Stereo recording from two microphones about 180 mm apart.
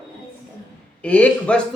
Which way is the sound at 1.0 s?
10° left (ahead or behind).